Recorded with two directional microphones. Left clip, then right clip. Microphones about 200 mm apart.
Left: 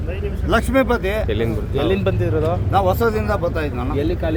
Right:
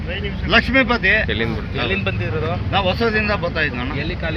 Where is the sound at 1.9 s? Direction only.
60° left (ahead or behind).